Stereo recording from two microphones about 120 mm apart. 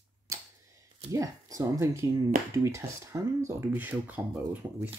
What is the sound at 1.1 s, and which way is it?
Speech, 30° right (ahead or behind).